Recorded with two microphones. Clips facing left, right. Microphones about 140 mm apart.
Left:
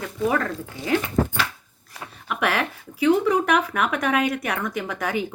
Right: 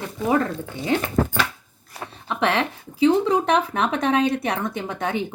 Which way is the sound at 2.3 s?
25° right (ahead or behind).